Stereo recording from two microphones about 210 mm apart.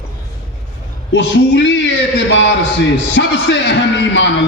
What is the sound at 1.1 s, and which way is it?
Speech, 60° left (ahead or behind).